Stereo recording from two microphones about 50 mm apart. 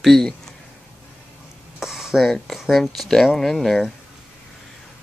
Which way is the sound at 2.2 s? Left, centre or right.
Centre.